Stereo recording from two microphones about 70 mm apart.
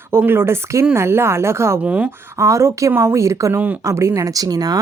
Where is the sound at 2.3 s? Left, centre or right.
Right.